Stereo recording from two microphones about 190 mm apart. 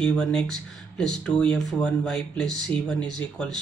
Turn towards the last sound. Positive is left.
turn(degrees=5)  # may be behind; listen again after turning